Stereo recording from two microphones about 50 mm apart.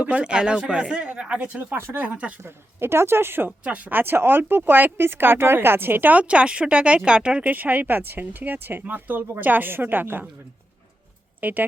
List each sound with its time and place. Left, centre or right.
0.0 s speech: right
1.5 s speech: right
2.0 s speech: right
2.4 s speech: right
6.2 s speech: right
7.4 s speech: right
11.3 s speech: right